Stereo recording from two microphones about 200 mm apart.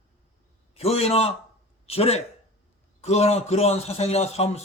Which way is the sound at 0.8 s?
30° left (ahead or behind).